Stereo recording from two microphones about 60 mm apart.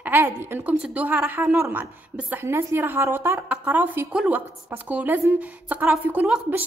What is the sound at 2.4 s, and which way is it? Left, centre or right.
Speech, right.